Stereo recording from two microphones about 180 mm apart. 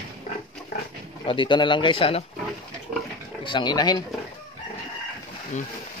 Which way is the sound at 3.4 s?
25° left (ahead or behind).